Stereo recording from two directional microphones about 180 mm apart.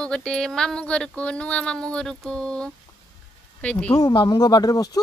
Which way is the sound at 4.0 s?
25° left (ahead or behind).